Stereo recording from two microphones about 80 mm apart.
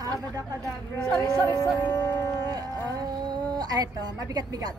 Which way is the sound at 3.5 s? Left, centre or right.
Right.